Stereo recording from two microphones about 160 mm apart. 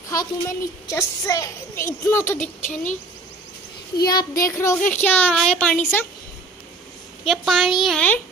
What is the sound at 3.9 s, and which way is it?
A woman's voice, 25° left (ahead or behind).